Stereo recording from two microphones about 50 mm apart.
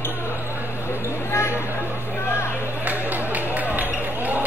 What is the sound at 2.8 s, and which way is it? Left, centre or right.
Music, right.